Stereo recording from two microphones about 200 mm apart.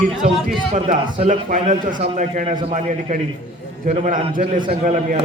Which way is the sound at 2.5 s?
25° right (ahead or behind).